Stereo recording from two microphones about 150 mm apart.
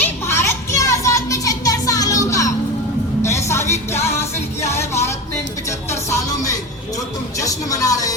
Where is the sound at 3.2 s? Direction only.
20° left (ahead or behind).